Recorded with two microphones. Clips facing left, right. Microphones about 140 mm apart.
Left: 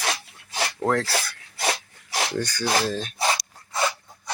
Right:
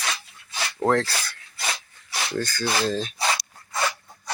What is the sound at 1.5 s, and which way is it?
Dog, 60° left (ahead or behind).